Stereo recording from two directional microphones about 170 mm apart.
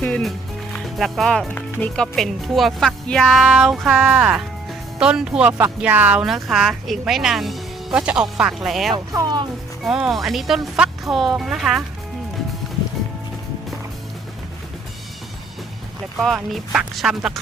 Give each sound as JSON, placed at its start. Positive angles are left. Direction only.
{"t": 0.0, "sound": "speech", "side_deg": 5}
{"t": 9.1, "sound": "speech", "side_deg": -25}
{"t": 9.8, "sound": "speech", "side_deg": 0}
{"t": 16.1, "sound": "speech", "side_deg": 0}